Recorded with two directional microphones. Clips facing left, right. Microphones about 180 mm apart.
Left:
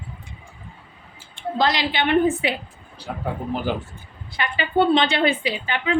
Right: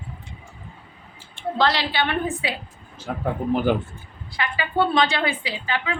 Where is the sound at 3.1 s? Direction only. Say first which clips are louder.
Right 2 dB; 45° right (ahead or behind).